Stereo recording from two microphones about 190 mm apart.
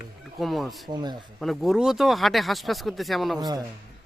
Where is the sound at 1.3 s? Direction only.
Centre (ahead or behind).